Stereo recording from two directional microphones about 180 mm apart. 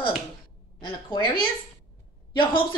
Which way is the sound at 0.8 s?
25° left (ahead or behind).